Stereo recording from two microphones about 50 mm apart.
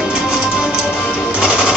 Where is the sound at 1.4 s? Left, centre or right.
Right.